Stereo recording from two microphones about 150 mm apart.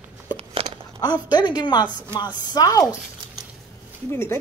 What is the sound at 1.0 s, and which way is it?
A woman's voice, 30° left (ahead or behind).